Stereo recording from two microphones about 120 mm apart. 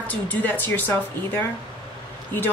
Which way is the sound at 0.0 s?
15° left (ahead or behind).